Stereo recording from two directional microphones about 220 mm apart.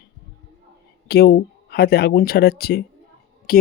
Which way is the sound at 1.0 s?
45° left (ahead or behind).